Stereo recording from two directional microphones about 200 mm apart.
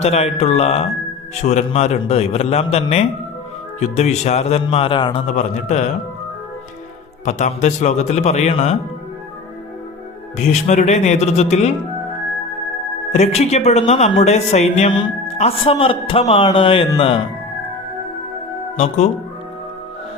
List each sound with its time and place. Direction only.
0.0 s speech: 30° left (ahead or behind)
5.2 s speech: 35° left (ahead or behind)
7.3 s speech: 35° left (ahead or behind)
10.3 s speech: 35° left (ahead or behind)
13.1 s speech: 30° left (ahead or behind)
18.8 s speech: 35° left (ahead or behind)